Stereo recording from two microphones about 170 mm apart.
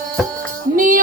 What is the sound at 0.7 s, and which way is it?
Music, 55° right (ahead or behind).